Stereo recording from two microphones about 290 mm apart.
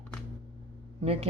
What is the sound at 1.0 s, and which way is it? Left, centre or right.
Speech, right.